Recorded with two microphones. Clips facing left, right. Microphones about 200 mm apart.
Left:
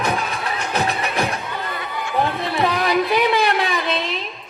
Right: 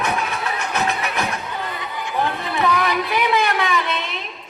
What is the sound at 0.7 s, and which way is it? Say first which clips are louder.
Music: left 2 dB; 35° left (ahead or behind).